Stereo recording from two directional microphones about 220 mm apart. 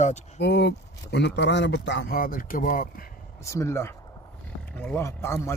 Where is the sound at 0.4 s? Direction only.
50° left (ahead or behind).